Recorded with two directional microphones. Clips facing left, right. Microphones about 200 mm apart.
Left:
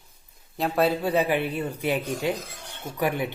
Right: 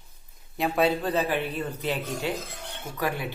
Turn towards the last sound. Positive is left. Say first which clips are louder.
# left 3 dB
turn(degrees=20)  # may be behind; listen again after turning